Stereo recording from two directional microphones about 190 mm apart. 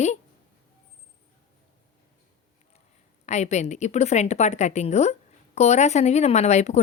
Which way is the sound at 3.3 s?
35° left (ahead or behind).